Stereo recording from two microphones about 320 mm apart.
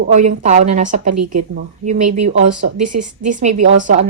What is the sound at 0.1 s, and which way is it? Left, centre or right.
A woman's voice, right.